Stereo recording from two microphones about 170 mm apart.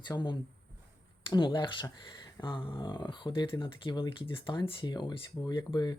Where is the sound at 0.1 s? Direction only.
25° left (ahead or behind).